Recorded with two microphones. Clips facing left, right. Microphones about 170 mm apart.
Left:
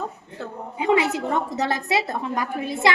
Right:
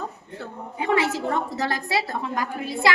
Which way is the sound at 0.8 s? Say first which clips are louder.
Left 2 dB; 20° left (ahead or behind).